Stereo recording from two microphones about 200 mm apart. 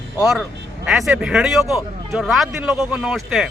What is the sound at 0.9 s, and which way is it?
Speech, centre (ahead or behind).